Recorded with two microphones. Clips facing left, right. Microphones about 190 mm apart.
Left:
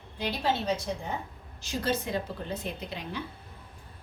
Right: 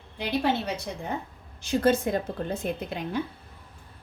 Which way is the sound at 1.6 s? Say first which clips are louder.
Right 8 dB; 55° right (ahead or behind).